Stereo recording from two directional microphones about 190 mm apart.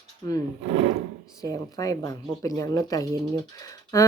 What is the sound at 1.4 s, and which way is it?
Speech, 20° left (ahead or behind).